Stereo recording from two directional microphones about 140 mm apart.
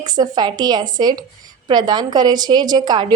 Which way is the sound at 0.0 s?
30° right (ahead or behind).